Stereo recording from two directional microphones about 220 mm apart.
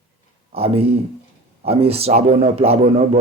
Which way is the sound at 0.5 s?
25° right (ahead or behind).